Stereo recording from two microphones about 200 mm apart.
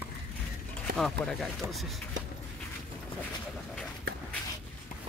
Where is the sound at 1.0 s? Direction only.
Centre (ahead or behind).